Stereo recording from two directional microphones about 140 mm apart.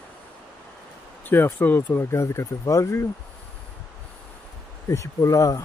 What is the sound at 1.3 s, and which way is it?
Speech, 15° left (ahead or behind).